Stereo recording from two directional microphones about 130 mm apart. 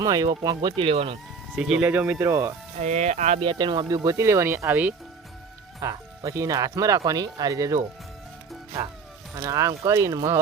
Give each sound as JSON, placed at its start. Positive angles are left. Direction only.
{"t": 0.0, "sound": "speech", "side_deg": -30}
{"t": 1.5, "sound": "speech", "side_deg": -5}
{"t": 2.7, "sound": "speech", "side_deg": -65}
{"t": 3.4, "sound": "speech", "side_deg": -40}
{"t": 5.8, "sound": "speech", "side_deg": -25}
{"t": 9.4, "sound": "speech", "side_deg": -20}